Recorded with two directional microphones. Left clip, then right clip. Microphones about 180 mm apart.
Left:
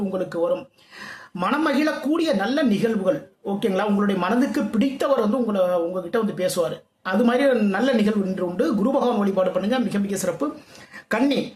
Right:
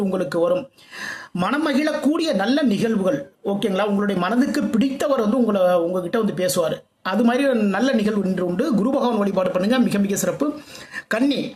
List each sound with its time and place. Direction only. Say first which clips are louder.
0.1 s a man's voice: right 2 dB; 30° right (ahead or behind)